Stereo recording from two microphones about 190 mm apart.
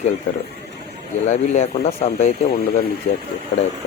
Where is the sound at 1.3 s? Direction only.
35° left (ahead or behind).